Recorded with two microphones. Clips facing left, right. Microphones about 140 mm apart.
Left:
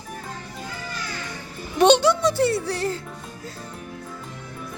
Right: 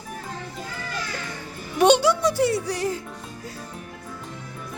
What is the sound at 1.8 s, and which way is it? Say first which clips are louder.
Speech: left 1 dB; 10° right (ahead or behind).